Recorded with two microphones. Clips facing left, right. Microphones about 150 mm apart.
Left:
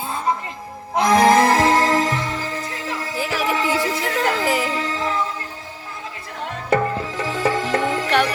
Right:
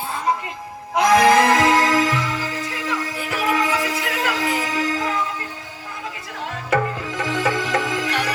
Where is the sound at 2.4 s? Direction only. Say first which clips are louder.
Right 1 dB; 40° left (ahead or behind).